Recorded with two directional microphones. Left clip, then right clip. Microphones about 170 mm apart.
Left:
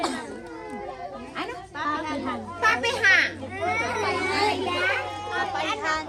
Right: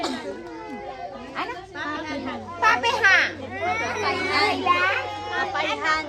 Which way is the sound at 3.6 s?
20° left (ahead or behind).